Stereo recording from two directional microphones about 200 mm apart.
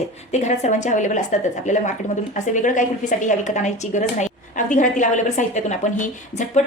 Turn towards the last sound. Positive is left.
turn(degrees=35)  # may be behind; listen again after turning